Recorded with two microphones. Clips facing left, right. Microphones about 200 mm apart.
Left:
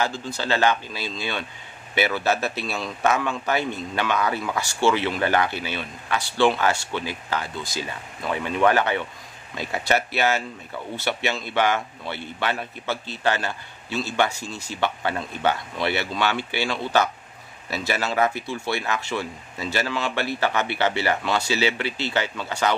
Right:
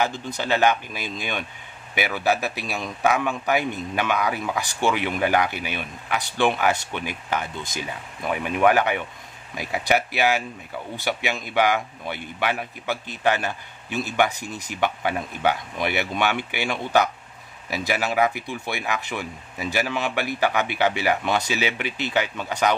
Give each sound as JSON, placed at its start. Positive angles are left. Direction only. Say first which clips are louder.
{"t": 0.0, "sound": "a man's voice", "louder": "right 1 dB", "side_deg": -20}